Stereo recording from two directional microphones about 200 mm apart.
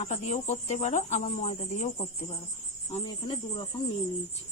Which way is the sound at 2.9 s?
25° left (ahead or behind).